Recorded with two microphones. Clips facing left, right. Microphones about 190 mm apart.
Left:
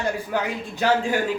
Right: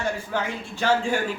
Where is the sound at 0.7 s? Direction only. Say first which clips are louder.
Left 1 dB; 15° left (ahead or behind).